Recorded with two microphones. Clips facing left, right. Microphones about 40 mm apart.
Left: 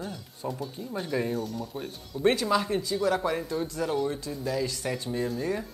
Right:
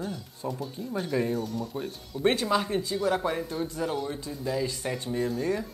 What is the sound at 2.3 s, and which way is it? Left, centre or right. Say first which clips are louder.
Speech: even; right.